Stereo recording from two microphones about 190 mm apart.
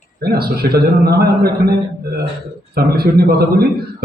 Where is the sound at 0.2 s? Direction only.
55° right (ahead or behind).